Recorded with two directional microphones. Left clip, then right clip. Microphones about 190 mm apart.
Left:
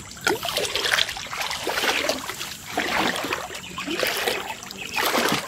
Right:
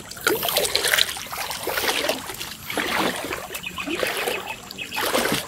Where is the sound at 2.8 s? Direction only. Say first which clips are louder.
Even; 10° right (ahead or behind).